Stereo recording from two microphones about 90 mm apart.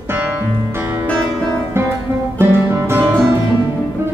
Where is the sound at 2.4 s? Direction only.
25° right (ahead or behind).